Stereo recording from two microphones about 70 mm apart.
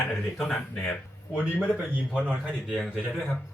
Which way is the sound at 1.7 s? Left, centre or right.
Centre.